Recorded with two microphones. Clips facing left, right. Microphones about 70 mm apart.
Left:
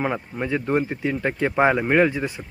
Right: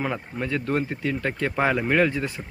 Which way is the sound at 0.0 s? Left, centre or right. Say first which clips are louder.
Left 3 dB; centre.